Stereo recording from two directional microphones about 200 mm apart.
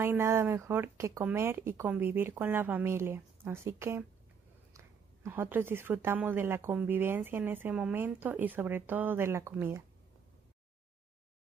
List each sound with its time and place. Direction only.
0.0 s a woman's voice: 10° right (ahead or behind)